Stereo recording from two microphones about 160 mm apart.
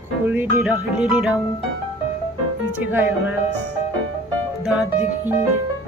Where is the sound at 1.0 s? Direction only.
5° right (ahead or behind).